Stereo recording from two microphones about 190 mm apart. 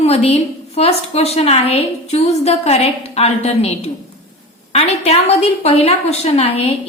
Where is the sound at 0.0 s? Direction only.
30° left (ahead or behind).